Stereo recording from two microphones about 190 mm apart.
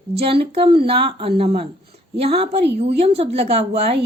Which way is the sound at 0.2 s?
30° right (ahead or behind).